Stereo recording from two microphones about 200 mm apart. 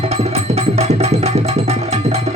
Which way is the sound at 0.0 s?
30° right (ahead or behind).